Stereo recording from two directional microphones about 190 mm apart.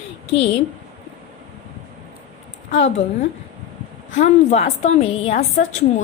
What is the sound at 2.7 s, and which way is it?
Speech, 75° left (ahead or behind).